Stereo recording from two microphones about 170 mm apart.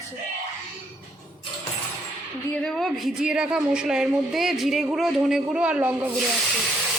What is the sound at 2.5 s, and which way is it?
A woman's voice, 5° left (ahead or behind).